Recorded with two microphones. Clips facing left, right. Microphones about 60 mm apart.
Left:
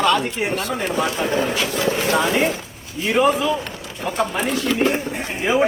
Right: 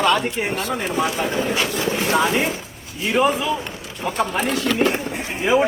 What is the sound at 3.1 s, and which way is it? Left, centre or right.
Speech, centre.